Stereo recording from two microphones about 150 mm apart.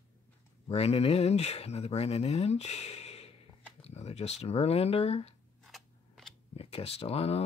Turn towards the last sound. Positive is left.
turn(degrees=45)  # may be behind; listen again after turning